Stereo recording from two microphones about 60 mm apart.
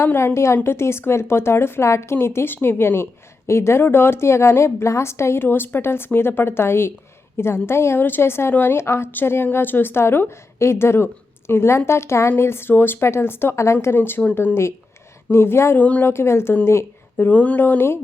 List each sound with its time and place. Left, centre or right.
0.0 s a woman's voice: left
13.9 s a woman's voice: left
15.8 s speech: left
16.0 s a woman's voice: left
17.2 s speech: left
17.6 s speech: left